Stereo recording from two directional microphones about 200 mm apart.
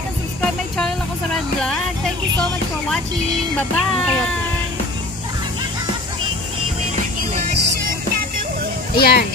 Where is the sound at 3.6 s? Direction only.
5° left (ahead or behind).